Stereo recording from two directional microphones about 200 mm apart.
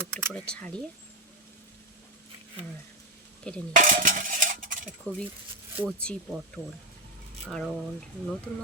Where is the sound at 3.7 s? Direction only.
40° right (ahead or behind).